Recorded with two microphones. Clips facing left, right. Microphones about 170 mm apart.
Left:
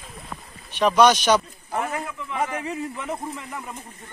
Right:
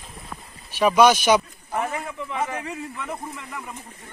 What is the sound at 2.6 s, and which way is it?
Speech, 20° left (ahead or behind).